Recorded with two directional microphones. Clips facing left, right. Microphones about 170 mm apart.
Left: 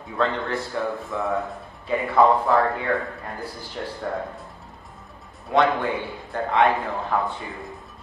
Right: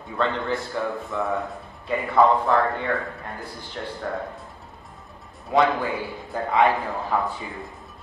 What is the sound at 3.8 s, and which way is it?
Speech, 5° left (ahead or behind).